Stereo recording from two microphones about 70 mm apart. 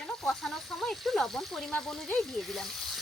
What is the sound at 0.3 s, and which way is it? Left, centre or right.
Speech, centre.